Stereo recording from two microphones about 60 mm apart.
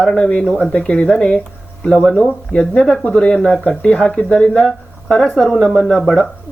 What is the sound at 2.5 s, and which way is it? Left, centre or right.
Speech, centre.